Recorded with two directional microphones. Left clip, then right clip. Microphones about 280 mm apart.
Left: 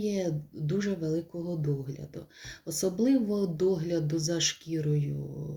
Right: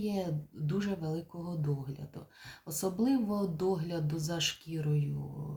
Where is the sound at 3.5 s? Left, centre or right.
Right.